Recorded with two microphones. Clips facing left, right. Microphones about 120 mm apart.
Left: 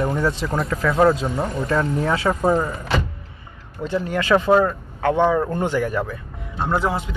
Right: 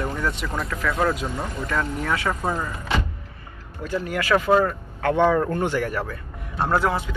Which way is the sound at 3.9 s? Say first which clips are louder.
Left 3 dB; 25° left (ahead or behind).